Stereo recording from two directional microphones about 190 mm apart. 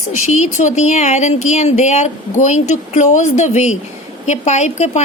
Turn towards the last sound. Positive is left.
turn(degrees=35)  # may be behind; listen again after turning